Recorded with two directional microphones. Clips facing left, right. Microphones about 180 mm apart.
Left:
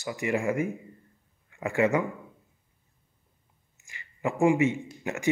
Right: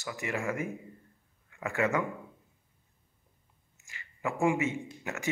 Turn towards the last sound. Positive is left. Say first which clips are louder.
# left 7 dB
turn(degrees=15)  # may be behind; listen again after turning